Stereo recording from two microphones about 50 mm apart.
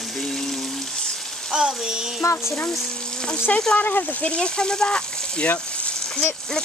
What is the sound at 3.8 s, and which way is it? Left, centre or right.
Speech, left.